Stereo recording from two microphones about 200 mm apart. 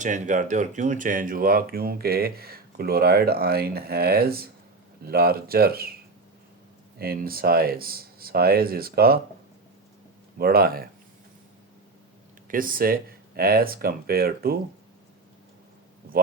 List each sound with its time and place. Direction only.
0.0 s speech: 40° right (ahead or behind)
7.0 s speech: 50° right (ahead or behind)
10.3 s speech: 50° right (ahead or behind)
12.5 s speech: 45° right (ahead or behind)